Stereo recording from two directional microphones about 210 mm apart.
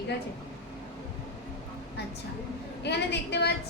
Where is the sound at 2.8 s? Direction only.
55° left (ahead or behind).